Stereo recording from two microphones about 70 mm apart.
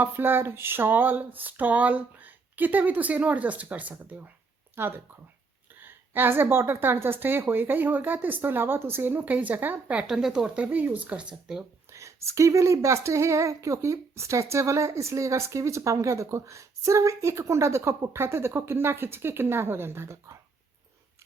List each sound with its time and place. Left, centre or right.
0.0 s a woman's voice: right
10.0 s speech: centre
11.9 s speech: right